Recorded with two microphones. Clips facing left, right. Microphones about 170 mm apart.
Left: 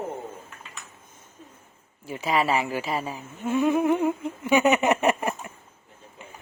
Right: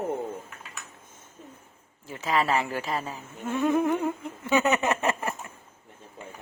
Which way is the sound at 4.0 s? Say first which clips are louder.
Left 5 dB; 10° left (ahead or behind).